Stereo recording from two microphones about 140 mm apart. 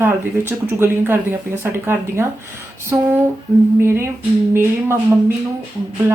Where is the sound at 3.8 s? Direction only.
15° right (ahead or behind).